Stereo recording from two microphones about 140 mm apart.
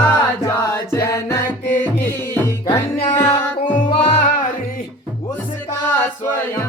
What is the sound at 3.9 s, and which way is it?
Music, 40° left (ahead or behind).